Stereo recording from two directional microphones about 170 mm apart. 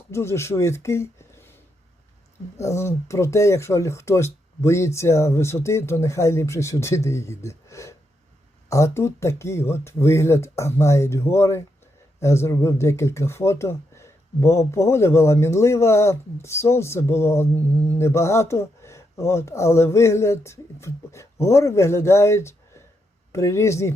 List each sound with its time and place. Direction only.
0.1 s speech: 15° left (ahead or behind)
2.6 s speech: 15° left (ahead or behind)